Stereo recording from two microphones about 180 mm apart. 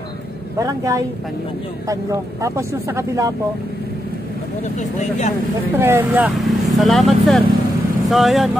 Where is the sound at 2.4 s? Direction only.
15° right (ahead or behind).